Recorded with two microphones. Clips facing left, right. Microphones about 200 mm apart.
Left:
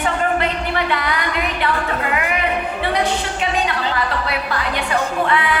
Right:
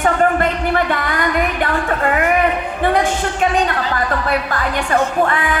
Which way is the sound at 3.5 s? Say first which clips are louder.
Right 3 dB; 45° right (ahead or behind).